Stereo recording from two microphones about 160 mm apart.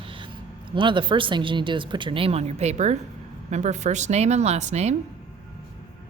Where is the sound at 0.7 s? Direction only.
30° right (ahead or behind).